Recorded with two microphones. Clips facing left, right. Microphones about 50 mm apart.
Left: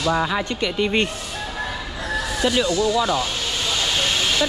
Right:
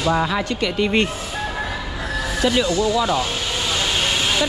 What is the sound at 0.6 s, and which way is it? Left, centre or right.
Speech, right.